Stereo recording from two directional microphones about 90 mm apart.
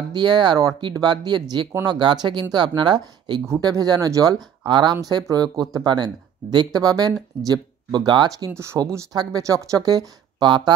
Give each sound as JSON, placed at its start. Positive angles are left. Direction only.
{"t": 0.1, "sound": "speech", "side_deg": -55}
{"t": 4.6, "sound": "speech", "side_deg": -60}
{"t": 5.3, "sound": "speech", "side_deg": -45}